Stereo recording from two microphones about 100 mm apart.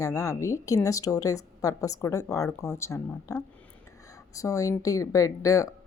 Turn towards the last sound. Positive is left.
turn(degrees=35)  # may be behind; listen again after turning